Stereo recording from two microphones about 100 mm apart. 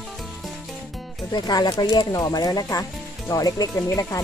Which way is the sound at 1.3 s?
45° left (ahead or behind).